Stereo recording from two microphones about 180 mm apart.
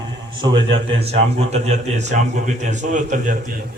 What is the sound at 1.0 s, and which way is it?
A man's voice, 35° right (ahead or behind).